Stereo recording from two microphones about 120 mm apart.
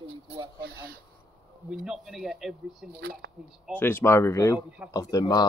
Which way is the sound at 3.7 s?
20° left (ahead or behind).